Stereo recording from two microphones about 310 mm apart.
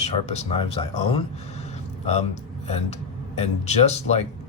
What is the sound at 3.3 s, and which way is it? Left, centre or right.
Speech, left.